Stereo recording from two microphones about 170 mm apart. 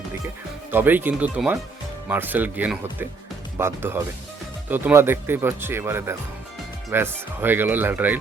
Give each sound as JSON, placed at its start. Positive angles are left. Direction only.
{"t": 0.7, "sound": "speech", "side_deg": -10}